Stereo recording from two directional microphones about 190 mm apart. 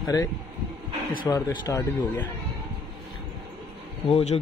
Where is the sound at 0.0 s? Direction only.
20° left (ahead or behind).